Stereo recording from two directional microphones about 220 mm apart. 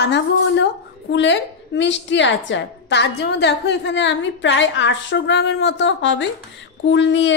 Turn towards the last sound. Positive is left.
turn(degrees=55)  # may be behind; listen again after turning